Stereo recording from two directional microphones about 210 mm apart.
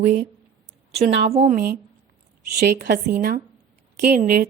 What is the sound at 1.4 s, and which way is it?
A woman's voice, 45° right (ahead or behind).